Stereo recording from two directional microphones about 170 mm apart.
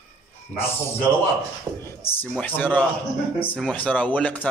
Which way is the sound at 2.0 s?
10° left (ahead or behind).